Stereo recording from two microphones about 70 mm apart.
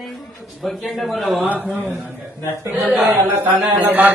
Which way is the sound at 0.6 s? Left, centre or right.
Centre.